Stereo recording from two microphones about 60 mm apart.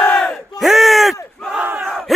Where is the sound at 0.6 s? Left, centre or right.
Centre.